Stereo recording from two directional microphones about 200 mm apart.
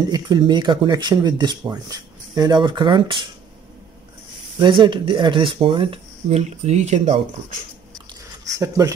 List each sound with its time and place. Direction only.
0.1 s speech: 20° right (ahead or behind)
4.6 s speech: 25° right (ahead or behind)
8.5 s speech: 15° right (ahead or behind)